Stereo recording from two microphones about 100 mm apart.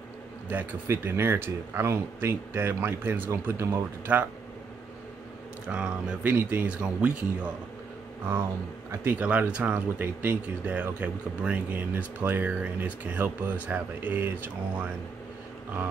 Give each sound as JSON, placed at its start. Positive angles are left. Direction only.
{"t": 0.5, "sound": "speech", "side_deg": -20}
{"t": 5.7, "sound": "speech", "side_deg": -10}
{"t": 9.0, "sound": "speech", "side_deg": -15}